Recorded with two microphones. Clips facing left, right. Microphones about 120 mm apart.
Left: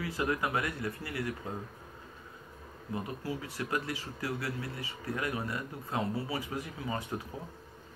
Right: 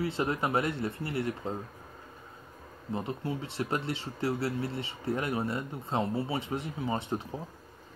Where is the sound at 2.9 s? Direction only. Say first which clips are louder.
Right 3 dB; 25° right (ahead or behind).